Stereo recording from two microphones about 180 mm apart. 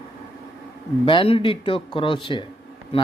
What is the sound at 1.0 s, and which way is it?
Speech, 30° left (ahead or behind).